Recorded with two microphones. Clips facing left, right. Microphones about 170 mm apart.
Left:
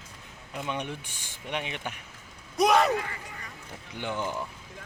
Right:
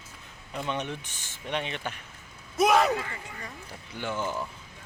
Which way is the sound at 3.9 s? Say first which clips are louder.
Right 1 dB; 15° left (ahead or behind).